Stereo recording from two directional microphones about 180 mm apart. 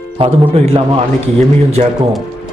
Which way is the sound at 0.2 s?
35° right (ahead or behind).